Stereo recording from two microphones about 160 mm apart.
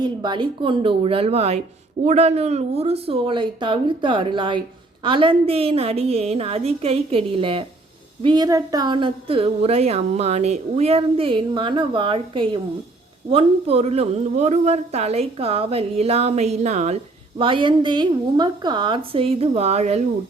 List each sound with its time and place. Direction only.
0.0 s a woman's voice: 30° right (ahead or behind)